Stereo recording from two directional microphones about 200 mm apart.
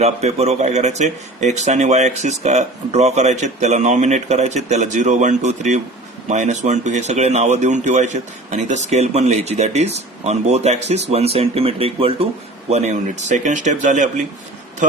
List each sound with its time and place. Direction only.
0.0 s speech: 30° right (ahead or behind)